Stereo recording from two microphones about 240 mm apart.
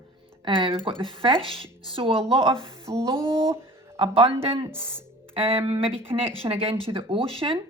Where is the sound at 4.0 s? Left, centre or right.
Right.